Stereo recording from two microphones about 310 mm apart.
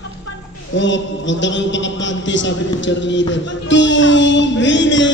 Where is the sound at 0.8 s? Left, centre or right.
Left.